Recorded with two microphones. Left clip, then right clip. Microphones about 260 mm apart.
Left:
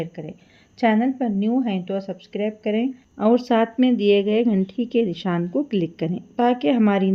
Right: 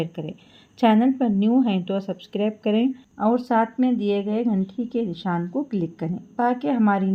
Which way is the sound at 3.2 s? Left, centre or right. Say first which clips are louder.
Left 2 dB; left.